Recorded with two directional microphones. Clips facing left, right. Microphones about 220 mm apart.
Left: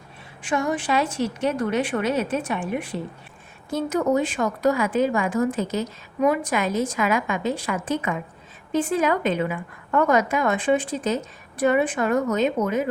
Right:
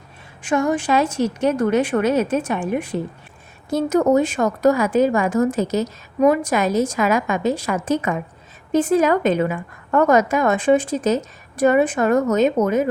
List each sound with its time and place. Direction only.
0.4 s a woman's voice: 45° right (ahead or behind)